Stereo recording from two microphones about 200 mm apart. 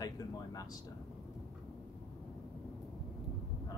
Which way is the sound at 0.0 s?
15° left (ahead or behind).